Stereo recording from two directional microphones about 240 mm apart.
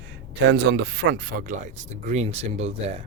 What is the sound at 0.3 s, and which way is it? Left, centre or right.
Speech, right.